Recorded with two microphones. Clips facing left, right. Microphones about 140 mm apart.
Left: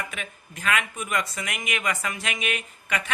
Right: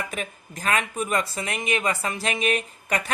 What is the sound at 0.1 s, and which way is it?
Speech, 40° right (ahead or behind).